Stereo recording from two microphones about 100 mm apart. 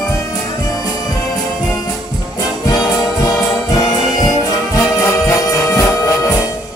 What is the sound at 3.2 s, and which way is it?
Music, 35° left (ahead or behind).